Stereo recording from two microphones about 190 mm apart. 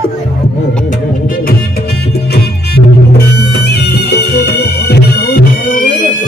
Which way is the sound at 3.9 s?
60° left (ahead or behind).